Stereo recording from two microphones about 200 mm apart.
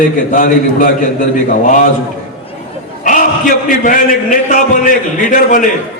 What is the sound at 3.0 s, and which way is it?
A man's voice, 40° left (ahead or behind).